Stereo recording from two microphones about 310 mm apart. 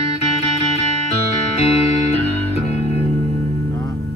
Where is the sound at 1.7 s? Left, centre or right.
Centre.